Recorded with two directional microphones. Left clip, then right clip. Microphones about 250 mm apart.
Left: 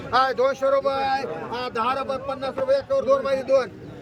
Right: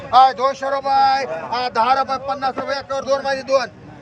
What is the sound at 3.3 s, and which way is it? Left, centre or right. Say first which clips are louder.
Speech: right 2 dB; centre.